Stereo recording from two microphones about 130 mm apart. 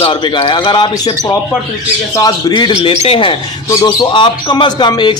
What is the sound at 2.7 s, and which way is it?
Speech, 45° left (ahead or behind).